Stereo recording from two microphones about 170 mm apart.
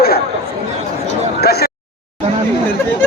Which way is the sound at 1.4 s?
70° left (ahead or behind).